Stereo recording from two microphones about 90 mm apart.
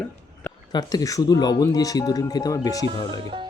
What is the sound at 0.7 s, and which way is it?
Speech, 50° left (ahead or behind).